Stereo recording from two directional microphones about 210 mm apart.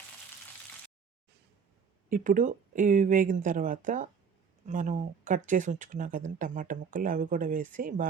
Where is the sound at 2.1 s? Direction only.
40° right (ahead or behind).